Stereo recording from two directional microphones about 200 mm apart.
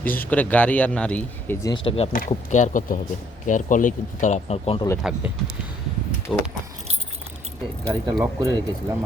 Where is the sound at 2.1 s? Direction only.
40° left (ahead or behind).